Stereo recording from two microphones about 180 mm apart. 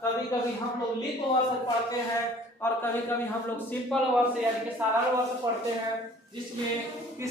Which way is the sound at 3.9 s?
Centre (ahead or behind).